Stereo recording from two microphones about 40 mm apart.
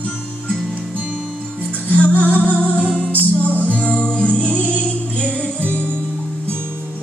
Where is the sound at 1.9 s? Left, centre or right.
Left.